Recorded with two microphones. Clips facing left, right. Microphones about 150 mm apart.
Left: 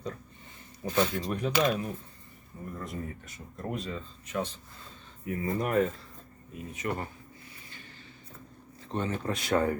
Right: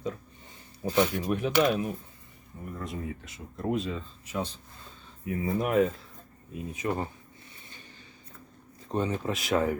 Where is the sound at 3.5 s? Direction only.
5° right (ahead or behind).